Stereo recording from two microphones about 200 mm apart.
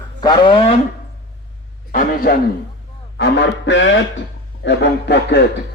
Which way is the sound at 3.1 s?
60° left (ahead or behind).